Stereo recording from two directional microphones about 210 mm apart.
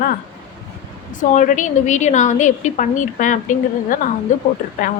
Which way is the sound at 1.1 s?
35° left (ahead or behind).